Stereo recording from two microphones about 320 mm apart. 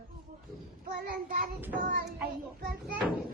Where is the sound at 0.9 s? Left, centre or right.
Right.